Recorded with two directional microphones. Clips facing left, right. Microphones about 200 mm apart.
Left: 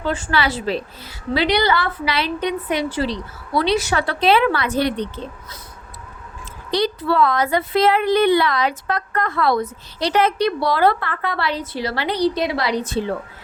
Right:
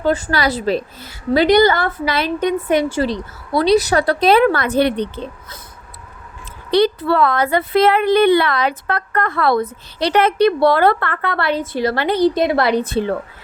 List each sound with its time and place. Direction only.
0.0 s a woman's voice: 40° right (ahead or behind); by 5.5 s 60° right (ahead or behind)
6.7 s a woman's voice: 60° right (ahead or behind)